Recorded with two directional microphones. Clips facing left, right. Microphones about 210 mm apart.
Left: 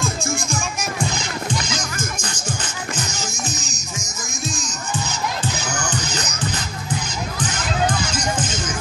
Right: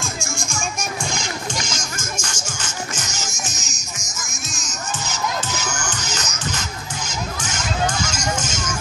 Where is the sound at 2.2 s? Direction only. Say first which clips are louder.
Left 4 dB; 35° left (ahead or behind).